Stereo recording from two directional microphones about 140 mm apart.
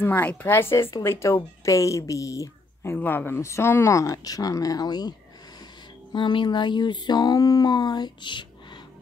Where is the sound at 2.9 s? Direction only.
15° left (ahead or behind).